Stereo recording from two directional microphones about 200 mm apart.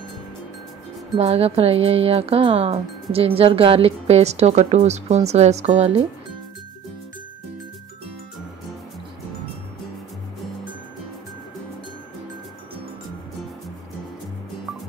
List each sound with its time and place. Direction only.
1.1 s speech: 30° right (ahead or behind)